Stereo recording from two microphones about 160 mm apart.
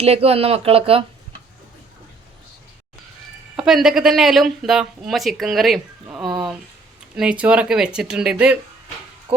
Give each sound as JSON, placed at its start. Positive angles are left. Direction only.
{"t": 0.0, "sound": "speech", "side_deg": -40}
{"t": 3.6, "sound": "speech", "side_deg": -5}